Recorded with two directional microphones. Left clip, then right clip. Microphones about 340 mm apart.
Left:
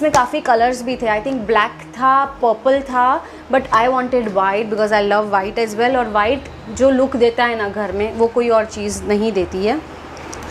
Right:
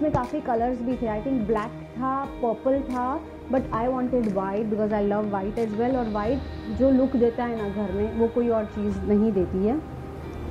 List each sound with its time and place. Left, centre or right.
0.0 s a woman's voice: centre
9.2 s a woman's voice: left